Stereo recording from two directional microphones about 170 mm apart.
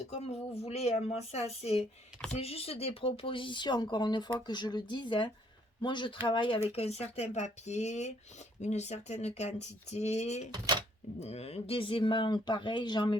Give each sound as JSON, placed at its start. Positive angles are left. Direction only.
{"t": 0.1, "sound": "speech", "side_deg": 40}
{"t": 10.5, "sound": "speech", "side_deg": -25}
{"t": 11.2, "sound": "speech", "side_deg": 35}